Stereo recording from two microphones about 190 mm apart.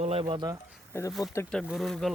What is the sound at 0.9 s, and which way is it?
Speech, 10° left (ahead or behind).